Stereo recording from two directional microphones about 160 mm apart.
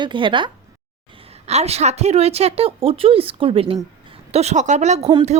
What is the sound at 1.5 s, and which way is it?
Speech, 40° right (ahead or behind).